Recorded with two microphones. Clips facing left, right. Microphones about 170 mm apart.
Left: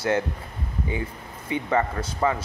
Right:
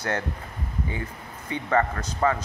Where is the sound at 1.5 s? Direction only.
15° left (ahead or behind).